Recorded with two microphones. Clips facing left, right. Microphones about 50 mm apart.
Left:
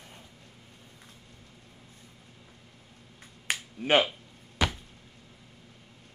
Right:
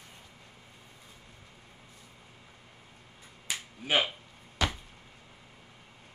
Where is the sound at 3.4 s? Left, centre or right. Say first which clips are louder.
Left 6 dB; left.